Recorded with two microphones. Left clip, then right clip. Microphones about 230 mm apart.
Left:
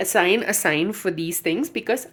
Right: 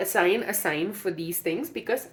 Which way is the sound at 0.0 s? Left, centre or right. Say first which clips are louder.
Left 4 dB; left.